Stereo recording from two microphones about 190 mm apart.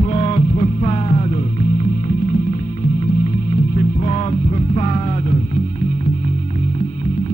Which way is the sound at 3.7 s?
35° left (ahead or behind).